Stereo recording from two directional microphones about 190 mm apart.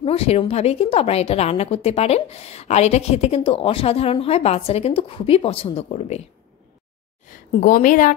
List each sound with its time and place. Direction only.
0.0 s a woman's voice: 30° left (ahead or behind)
7.6 s a woman's voice: 45° left (ahead or behind)